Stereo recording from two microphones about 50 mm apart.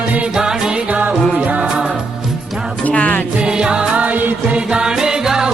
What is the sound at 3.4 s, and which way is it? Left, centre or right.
Music, centre.